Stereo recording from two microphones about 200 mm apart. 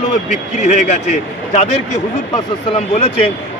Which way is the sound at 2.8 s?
30° left (ahead or behind).